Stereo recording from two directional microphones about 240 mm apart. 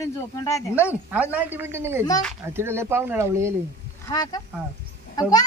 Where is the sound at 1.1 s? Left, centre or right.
Centre.